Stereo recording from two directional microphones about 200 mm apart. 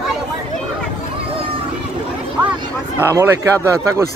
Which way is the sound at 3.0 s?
15° right (ahead or behind).